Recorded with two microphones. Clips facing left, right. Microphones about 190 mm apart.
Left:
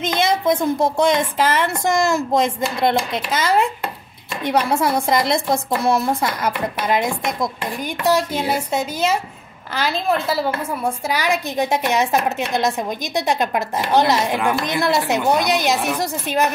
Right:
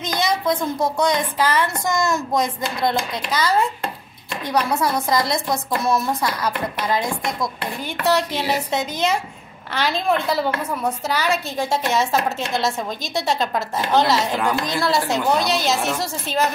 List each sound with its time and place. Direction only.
0.0 s a woman's voice: 25° left (ahead or behind)
8.0 s a woman's voice: 10° left (ahead or behind)